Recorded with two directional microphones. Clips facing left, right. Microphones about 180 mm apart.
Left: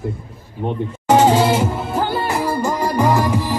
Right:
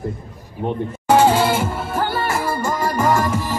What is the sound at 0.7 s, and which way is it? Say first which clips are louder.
Music: left 1 dB; 20° left (ahead or behind).